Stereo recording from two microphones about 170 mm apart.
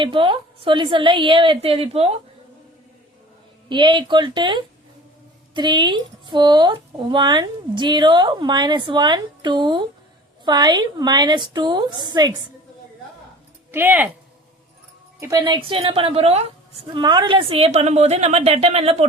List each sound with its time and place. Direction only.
0.0 s speech: 30° right (ahead or behind)
3.7 s speech: 25° right (ahead or behind)
13.7 s speech: 10° right (ahead or behind)
15.2 s a woman's voice: 20° right (ahead or behind); by 19.0 s 40° right (ahead or behind)